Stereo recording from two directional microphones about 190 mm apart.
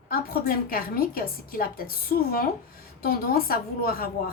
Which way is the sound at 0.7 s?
50° left (ahead or behind).